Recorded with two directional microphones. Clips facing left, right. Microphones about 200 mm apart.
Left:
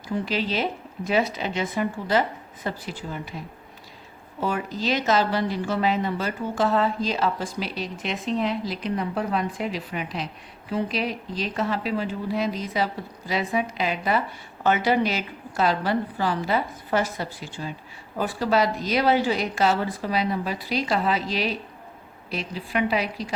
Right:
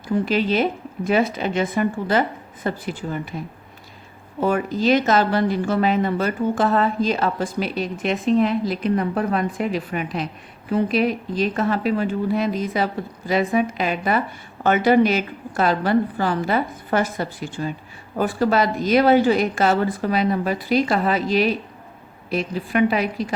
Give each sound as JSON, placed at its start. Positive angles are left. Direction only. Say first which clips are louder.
{"t": 0.3, "sound": "speech", "louder": "right 6 dB", "side_deg": -55}
{"t": 4.4, "sound": "speech", "louder": "right 6 dB", "side_deg": -55}